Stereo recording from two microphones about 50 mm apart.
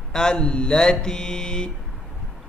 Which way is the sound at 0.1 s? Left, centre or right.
Centre.